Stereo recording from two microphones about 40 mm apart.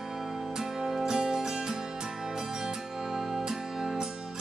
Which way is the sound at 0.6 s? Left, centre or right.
Centre.